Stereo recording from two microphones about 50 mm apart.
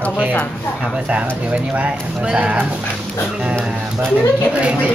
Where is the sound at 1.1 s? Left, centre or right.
Right.